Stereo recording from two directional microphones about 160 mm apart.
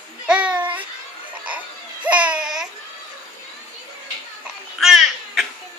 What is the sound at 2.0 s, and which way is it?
Babbling, 10° right (ahead or behind).